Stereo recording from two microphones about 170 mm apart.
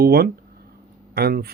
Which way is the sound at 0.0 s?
65° right (ahead or behind).